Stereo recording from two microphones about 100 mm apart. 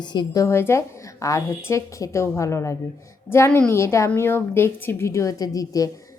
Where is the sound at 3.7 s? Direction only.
30° left (ahead or behind).